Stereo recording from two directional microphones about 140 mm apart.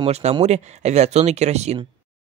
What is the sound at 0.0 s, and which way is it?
Speech, 50° right (ahead or behind).